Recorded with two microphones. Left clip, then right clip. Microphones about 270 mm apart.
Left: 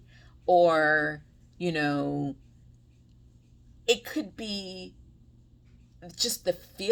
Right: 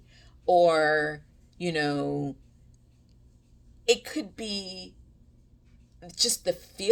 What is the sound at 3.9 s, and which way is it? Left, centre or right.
Speech, centre.